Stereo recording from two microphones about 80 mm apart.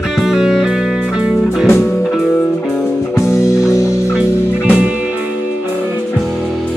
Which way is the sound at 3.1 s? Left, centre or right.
Left.